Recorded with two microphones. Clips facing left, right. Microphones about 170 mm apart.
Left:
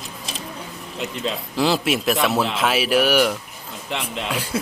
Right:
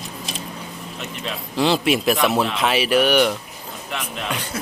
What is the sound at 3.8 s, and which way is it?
Speech, 30° left (ahead or behind).